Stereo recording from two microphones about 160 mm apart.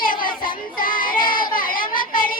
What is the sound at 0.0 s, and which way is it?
Child singing, 60° left (ahead or behind).